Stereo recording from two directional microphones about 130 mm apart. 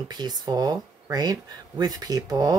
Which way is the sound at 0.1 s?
30° right (ahead or behind).